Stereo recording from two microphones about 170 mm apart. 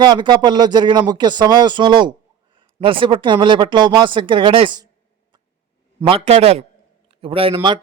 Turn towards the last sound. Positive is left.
turn(degrees=-30)  # may be behind; listen again after turning